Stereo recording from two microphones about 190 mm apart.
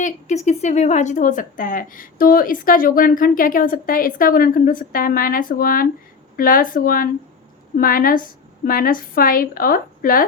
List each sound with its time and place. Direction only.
0.0 s speech: 40° left (ahead or behind)